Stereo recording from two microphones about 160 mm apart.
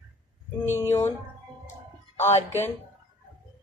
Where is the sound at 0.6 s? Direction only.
15° left (ahead or behind).